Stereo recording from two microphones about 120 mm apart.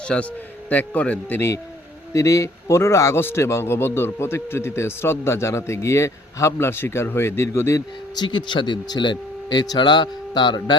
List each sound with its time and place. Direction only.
0.0 s a man's voice: 10° left (ahead or behind)
8.1 s speech: 40° left (ahead or behind)